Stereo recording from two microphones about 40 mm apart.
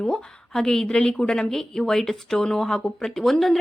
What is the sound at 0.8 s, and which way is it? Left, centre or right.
A woman's voice, left.